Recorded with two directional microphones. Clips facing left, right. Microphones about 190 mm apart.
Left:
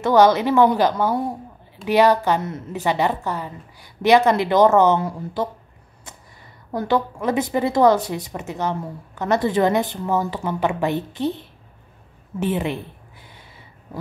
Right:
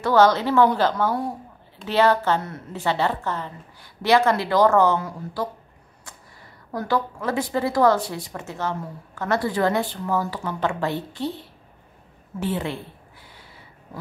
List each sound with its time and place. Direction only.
0.0 s a woman's voice: 15° left (ahead or behind)
6.7 s a woman's voice: 20° left (ahead or behind)